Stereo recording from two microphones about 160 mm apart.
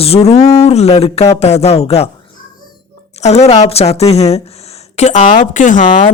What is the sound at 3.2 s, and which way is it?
Speech, 40° left (ahead or behind).